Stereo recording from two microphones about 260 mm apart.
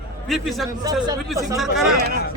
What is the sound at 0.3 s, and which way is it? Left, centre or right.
Speech, centre.